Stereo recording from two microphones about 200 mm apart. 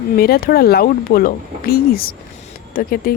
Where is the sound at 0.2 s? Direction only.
50° left (ahead or behind).